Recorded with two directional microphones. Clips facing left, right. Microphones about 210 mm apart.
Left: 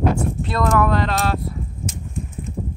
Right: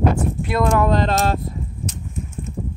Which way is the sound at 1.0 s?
45° right (ahead or behind).